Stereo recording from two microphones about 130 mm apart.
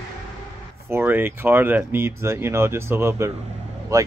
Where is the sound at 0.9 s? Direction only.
15° right (ahead or behind).